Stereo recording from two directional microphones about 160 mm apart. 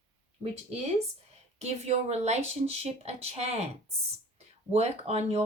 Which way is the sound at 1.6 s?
45° right (ahead or behind).